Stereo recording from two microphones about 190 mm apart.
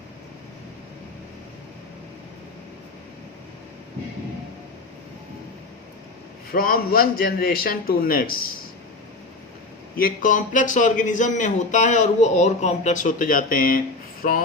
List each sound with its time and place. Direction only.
6.5 s a man's voice: 50° left (ahead or behind)
10.0 s a man's voice: 45° left (ahead or behind)